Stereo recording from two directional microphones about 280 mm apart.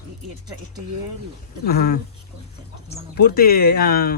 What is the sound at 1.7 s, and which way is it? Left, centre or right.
Speech, left.